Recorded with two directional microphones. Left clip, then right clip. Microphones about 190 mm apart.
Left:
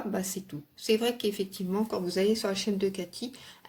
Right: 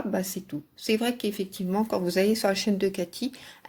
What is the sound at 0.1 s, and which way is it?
Speech, 30° right (ahead or behind).